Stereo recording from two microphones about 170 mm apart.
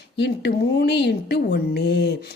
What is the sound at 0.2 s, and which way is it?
A woman's voice, 85° left.